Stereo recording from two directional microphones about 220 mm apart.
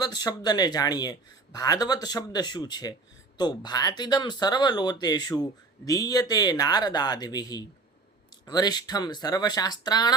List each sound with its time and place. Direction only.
0.0 s speech: 20° left (ahead or behind)